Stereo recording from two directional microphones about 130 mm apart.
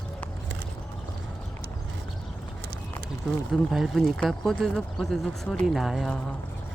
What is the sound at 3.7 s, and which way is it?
Speech, centre (ahead or behind).